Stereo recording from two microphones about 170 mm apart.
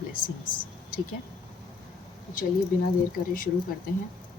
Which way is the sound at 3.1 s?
55° left (ahead or behind).